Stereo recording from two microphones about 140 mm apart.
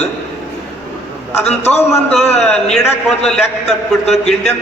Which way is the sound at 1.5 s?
50° left (ahead or behind).